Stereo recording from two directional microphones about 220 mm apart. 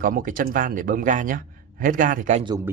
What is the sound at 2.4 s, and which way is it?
Speech, 15° right (ahead or behind).